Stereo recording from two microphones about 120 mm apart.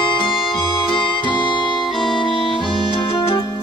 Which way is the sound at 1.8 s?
Centre (ahead or behind).